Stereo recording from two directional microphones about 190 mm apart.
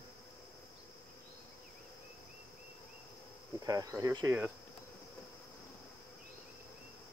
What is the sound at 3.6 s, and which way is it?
Cricket, 20° right (ahead or behind).